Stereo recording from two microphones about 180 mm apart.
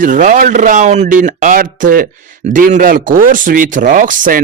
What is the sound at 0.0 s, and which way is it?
Speech, 45° right (ahead or behind).